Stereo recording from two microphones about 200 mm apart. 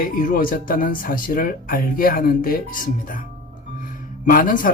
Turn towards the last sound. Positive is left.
turn(degrees=45)  # may be behind; listen again after turning